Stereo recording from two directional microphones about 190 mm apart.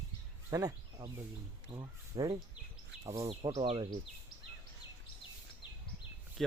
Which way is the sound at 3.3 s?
30° right (ahead or behind).